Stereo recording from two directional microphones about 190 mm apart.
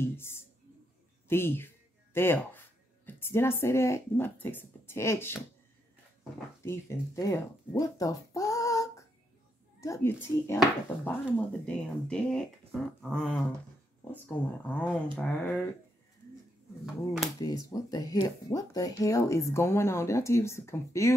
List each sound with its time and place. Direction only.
0.0 s speech: 10° left (ahead or behind)
6.6 s a child's voice: 15° left (ahead or behind)
16.8 s speech: 5° right (ahead or behind)
17.4 s speech: 20° left (ahead or behind)